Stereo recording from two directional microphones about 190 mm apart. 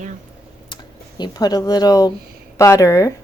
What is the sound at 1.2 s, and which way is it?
Speech, 20° left (ahead or behind).